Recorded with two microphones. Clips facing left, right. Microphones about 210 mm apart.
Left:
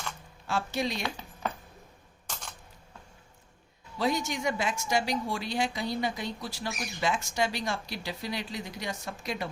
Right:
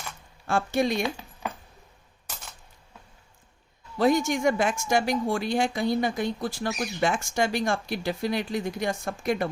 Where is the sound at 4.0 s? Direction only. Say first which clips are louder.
Right 7 dB; 50° right (ahead or behind).